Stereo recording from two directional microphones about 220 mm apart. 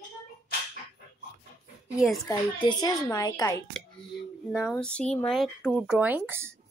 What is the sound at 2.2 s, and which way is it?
A child's voice, 15° left (ahead or behind).